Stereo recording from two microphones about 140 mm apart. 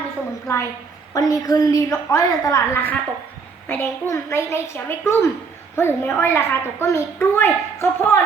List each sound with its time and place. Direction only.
0.4 s a woman's voice: 20° left (ahead or behind)